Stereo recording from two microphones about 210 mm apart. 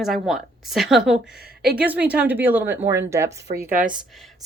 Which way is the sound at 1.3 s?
50° right (ahead or behind).